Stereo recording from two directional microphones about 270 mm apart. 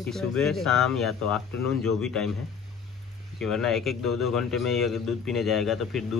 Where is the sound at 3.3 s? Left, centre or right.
Centre.